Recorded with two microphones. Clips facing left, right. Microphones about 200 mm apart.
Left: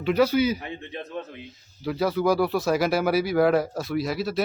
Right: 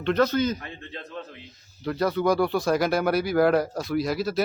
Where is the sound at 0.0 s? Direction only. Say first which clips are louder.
Left 2 dB; 10° left (ahead or behind).